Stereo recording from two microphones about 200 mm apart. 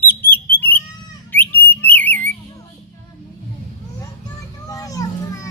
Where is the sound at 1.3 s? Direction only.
10° left (ahead or behind).